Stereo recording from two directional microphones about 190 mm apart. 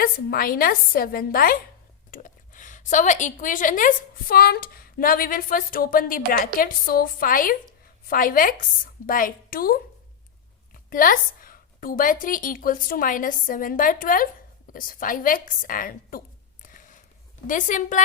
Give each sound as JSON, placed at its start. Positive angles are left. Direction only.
{"t": 0.0, "sound": "a woman's voice", "side_deg": 50}
{"t": 10.8, "sound": "a woman's voice", "side_deg": 50}
{"t": 16.6, "sound": "a sound", "side_deg": 45}
{"t": 17.4, "sound": "a woman's voice", "side_deg": 45}